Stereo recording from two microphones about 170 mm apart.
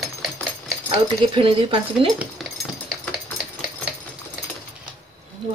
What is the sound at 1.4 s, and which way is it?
Speech, 30° right (ahead or behind).